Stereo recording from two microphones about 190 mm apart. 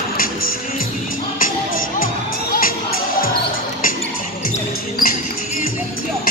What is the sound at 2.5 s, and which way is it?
Music, 50° left (ahead or behind).